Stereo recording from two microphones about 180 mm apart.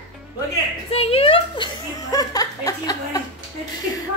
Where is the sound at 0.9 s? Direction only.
35° left (ahead or behind).